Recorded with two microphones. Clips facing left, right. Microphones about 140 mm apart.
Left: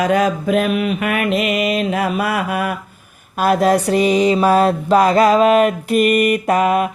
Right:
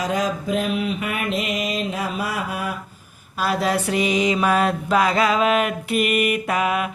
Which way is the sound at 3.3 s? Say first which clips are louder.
Left 7 dB; 50° left (ahead or behind).